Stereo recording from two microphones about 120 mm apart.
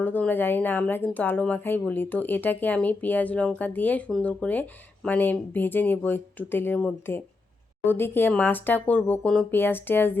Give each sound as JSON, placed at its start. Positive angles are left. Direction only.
{"t": 0.0, "sound": "speech", "side_deg": 15}